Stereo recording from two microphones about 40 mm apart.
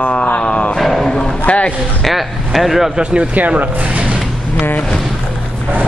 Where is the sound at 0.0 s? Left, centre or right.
Left.